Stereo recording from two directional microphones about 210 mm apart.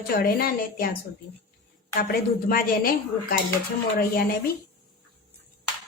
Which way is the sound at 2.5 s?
45° left (ahead or behind).